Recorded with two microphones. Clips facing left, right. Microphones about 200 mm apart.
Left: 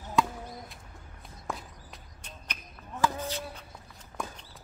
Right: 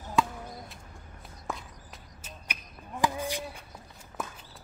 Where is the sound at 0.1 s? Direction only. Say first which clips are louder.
Even; centre (ahead or behind).